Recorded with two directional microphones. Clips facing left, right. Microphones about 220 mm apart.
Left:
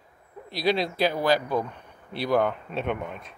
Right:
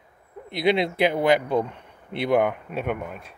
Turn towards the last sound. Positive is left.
turn(degrees=-5)  # may be behind; listen again after turning